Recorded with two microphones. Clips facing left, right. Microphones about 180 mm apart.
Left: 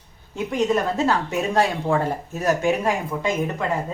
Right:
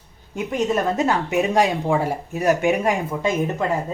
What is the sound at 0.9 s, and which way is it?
Speech, 15° right (ahead or behind).